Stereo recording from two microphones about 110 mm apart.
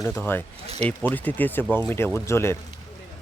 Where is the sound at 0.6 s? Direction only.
75° right (ahead or behind).